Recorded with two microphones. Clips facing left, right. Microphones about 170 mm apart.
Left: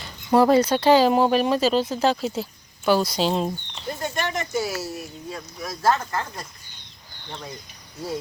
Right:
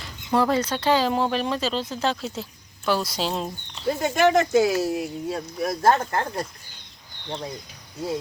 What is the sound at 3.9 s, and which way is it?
Speech, 90° right.